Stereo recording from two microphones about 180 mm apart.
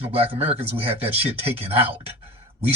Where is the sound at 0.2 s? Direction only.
30° right (ahead or behind).